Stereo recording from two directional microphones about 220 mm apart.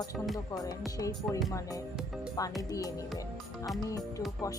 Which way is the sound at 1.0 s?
15° left (ahead or behind).